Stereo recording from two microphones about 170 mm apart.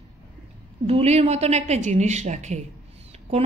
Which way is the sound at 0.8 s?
40° right (ahead or behind).